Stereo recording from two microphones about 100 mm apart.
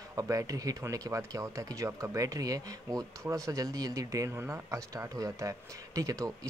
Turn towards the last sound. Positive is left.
turn(degrees=-35)  # may be behind; listen again after turning